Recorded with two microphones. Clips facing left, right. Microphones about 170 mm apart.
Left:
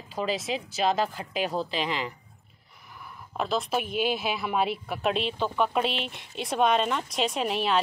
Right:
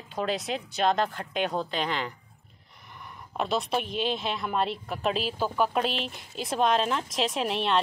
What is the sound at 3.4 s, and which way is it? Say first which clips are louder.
Speech: even; centre (ahead or behind).